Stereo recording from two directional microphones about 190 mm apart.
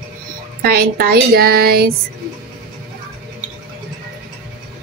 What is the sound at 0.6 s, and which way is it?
Speech, 55° right (ahead or behind).